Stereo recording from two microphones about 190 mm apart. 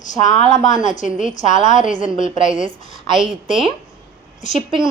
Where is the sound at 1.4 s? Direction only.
40° left (ahead or behind).